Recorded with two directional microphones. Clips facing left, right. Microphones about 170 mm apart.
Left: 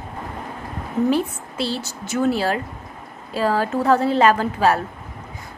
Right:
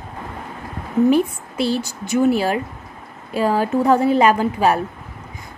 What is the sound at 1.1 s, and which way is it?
A woman's voice, 15° right (ahead or behind).